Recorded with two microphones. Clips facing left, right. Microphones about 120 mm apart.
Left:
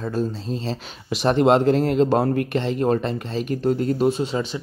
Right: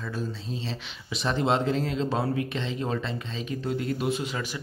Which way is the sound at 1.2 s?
60° left (ahead or behind).